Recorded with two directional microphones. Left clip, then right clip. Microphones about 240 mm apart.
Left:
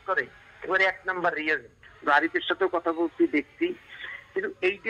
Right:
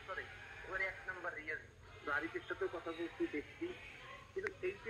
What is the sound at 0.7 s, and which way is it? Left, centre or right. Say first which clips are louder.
A man's voice: left 18 dB; left.